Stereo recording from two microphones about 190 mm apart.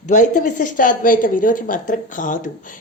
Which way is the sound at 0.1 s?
40° left (ahead or behind).